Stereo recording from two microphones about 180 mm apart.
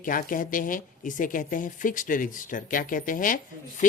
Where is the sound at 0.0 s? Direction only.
50° left (ahead or behind).